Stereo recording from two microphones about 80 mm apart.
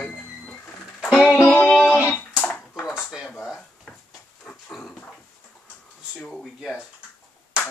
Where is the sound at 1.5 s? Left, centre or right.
Left.